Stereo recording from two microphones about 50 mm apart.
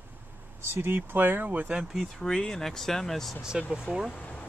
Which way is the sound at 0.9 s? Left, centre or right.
Right.